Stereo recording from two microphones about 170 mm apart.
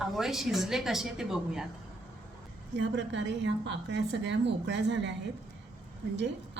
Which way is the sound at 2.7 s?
90° right.